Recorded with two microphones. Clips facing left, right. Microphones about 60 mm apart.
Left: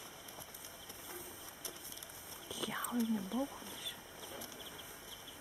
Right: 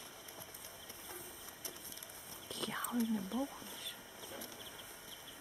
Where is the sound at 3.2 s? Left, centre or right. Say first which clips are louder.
Left 1 dB; centre.